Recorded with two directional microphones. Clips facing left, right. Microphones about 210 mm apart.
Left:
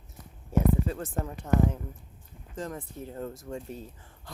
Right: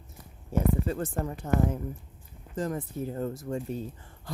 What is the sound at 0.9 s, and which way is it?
Speech, centre (ahead or behind).